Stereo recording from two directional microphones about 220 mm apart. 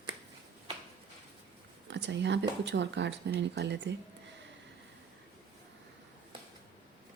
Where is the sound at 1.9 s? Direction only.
55° right (ahead or behind).